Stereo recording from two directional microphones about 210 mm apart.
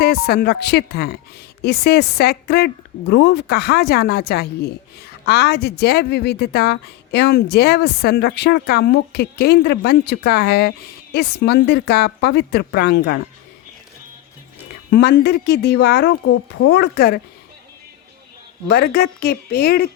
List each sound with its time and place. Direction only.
0.0 s speech: 45° left (ahead or behind)
14.8 s speech: 50° left (ahead or behind)
18.7 s speech: 50° left (ahead or behind)